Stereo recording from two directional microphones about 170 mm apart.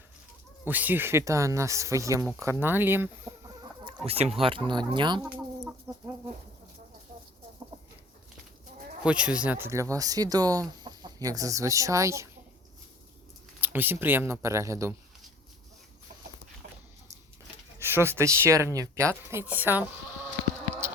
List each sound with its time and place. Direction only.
0.6 s speech: 10° right (ahead or behind); by 5.2 s 25° right (ahead or behind)
5.9 s chicken: 15° right (ahead or behind)
9.0 s speech: 5° right (ahead or behind)
13.6 s speech: 10° right (ahead or behind)
17.7 s speech: 15° right (ahead or behind)